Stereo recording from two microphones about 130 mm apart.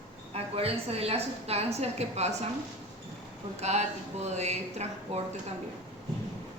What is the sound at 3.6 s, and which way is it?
A woman's voice, 60° right (ahead or behind).